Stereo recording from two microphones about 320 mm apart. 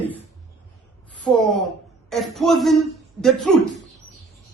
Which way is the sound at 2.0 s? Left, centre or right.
Centre.